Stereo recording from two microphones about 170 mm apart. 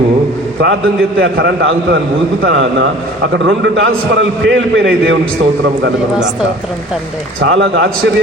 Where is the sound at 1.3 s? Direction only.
90° right.